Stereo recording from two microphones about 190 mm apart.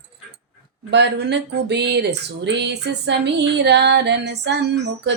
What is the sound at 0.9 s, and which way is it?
Music, 65° right (ahead or behind).